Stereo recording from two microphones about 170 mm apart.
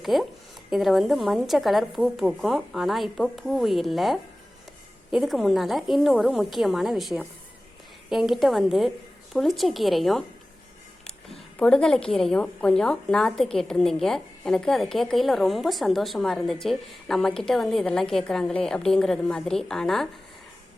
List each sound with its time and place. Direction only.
0.0 s a woman's voice: centre (ahead or behind)
11.6 s a woman's voice: 5° left (ahead or behind)